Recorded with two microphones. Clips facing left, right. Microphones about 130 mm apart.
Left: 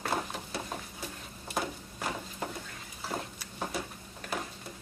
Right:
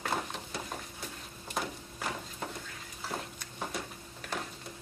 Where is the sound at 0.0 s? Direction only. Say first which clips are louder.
Left 1 dB; 5° left (ahead or behind).